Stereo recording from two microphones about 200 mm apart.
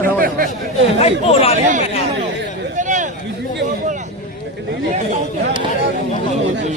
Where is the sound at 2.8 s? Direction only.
40° right (ahead or behind).